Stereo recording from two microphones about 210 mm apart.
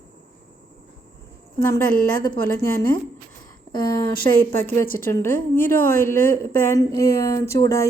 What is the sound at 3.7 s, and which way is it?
Speech, 20° left (ahead or behind).